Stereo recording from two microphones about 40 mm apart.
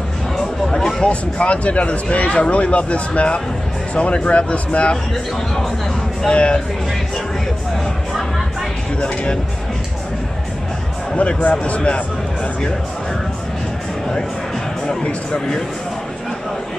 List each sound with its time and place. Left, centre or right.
0.7 s a sound: centre
1.0 s speech: left
6.2 s speech: left
9.0 s speech: left
11.1 s speech: left